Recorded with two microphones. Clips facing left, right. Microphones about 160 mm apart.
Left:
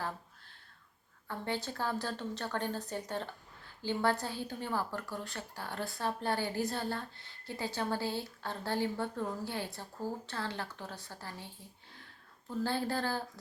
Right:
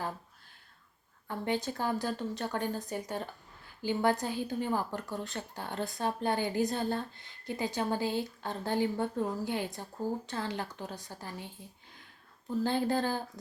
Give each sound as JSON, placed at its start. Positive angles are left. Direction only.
{"t": 1.3, "sound": "a woman's voice", "side_deg": -15}
{"t": 12.6, "sound": "speech", "side_deg": -20}